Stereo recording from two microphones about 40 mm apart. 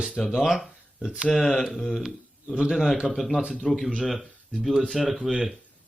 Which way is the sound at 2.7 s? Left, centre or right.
Centre.